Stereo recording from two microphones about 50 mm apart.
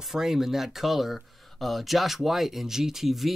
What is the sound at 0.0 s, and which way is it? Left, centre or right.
Speech, centre.